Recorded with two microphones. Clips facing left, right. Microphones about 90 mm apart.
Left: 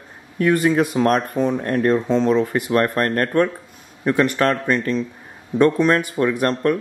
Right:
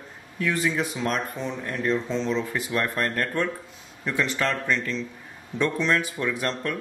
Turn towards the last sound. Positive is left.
turn(degrees=50)  # may be behind; listen again after turning